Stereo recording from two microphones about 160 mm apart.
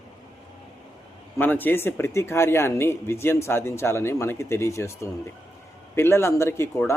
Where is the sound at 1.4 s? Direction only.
10° left (ahead or behind).